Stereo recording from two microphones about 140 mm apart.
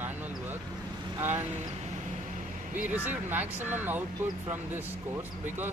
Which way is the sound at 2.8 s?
10° right (ahead or behind).